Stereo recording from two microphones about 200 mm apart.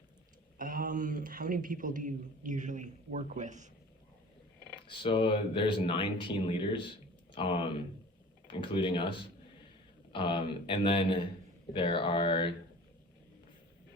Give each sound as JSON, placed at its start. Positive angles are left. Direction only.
{"t": 0.6, "sound": "a man's voice", "side_deg": -45}
{"t": 4.9, "sound": "speech", "side_deg": 25}
{"t": 10.1, "sound": "speech", "side_deg": 25}